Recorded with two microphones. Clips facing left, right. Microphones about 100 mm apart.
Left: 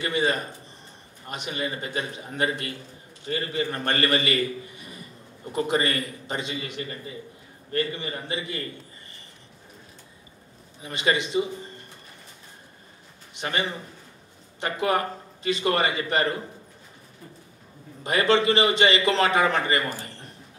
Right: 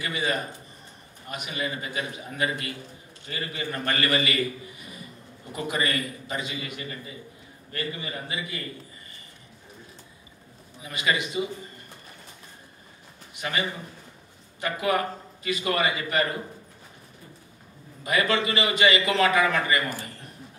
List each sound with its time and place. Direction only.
0.0 s a man's voice: 30° left (ahead or behind)
5.5 s a man's voice: 35° left (ahead or behind)
10.8 s a man's voice: 30° left (ahead or behind)
13.3 s a man's voice: 30° left (ahead or behind)
18.0 s a man's voice: 30° left (ahead or behind)